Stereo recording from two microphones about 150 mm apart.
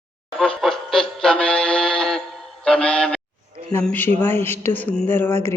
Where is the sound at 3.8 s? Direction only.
10° left (ahead or behind).